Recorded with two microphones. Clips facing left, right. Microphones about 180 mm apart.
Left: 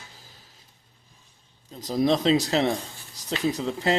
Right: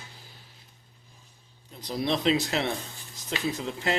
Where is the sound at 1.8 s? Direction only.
40° left (ahead or behind).